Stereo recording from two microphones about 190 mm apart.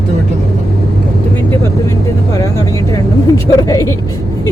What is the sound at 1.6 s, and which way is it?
Speech, 15° left (ahead or behind).